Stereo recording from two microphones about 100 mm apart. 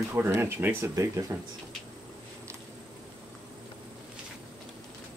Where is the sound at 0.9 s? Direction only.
35° right (ahead or behind).